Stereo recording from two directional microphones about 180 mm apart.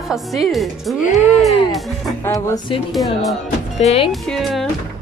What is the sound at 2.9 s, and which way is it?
A woman's voice, centre (ahead or behind).